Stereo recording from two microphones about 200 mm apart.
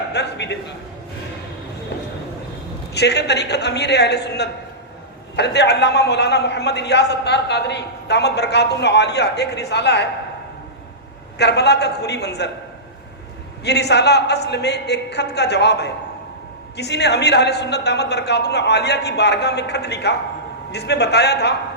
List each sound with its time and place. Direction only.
0.1 s a man's voice: 60° left (ahead or behind)
2.9 s a man's voice: 55° left (ahead or behind)
11.3 s a man's voice: 55° left (ahead or behind)
13.7 s a man's voice: 55° left (ahead or behind)